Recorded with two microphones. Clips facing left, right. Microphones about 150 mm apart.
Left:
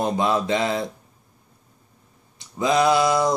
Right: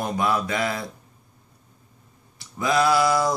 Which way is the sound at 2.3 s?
20° left (ahead or behind).